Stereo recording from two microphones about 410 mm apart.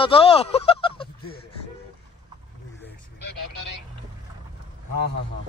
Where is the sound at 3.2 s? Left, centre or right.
Left.